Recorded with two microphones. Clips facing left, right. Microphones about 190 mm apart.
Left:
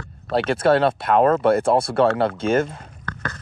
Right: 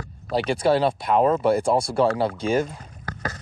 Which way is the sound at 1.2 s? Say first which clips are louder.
Left 3 dB; 65° left (ahead or behind).